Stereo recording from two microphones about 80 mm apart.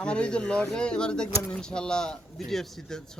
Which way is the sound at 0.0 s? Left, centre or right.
Centre.